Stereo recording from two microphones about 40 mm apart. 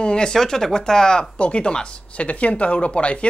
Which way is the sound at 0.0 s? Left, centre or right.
Left.